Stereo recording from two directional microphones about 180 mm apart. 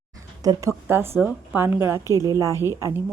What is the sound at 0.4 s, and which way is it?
Speech, 20° right (ahead or behind).